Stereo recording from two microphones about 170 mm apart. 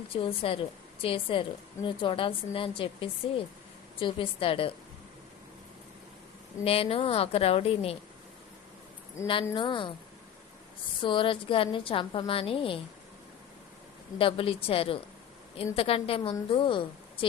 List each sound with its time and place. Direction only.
0.1 s a woman's voice: 35° left (ahead or behind)
6.7 s a woman's voice: 35° left (ahead or behind)
9.2 s speech: 15° left (ahead or behind)
9.6 s a woman's voice: 30° left (ahead or behind)
11.0 s a woman's voice: 30° left (ahead or behind)
14.2 s a woman's voice: 30° left (ahead or behind)